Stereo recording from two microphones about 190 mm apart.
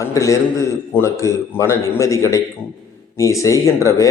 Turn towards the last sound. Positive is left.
turn(degrees=15)  # may be behind; listen again after turning